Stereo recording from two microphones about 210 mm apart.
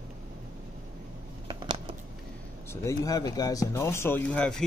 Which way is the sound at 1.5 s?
25° right (ahead or behind).